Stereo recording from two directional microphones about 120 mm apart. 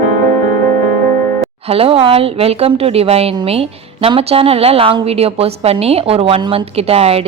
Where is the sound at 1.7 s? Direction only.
55° right (ahead or behind).